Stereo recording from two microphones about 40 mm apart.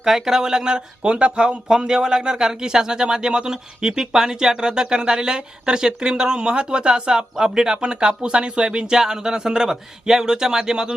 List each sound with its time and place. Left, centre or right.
0.0 s speech: centre